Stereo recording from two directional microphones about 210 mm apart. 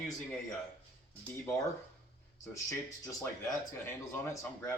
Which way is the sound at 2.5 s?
15° left (ahead or behind).